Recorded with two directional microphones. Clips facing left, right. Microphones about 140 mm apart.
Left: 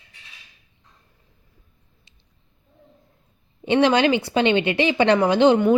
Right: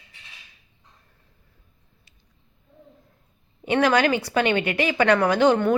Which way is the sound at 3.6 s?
25° left (ahead or behind).